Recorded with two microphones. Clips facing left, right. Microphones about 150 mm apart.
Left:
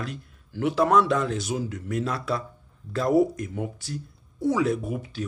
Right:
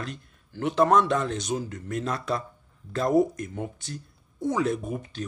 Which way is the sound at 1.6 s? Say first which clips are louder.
Left 3 dB; 45° right (ahead or behind).